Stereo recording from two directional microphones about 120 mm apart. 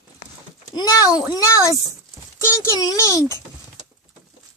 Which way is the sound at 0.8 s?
30° left (ahead or behind).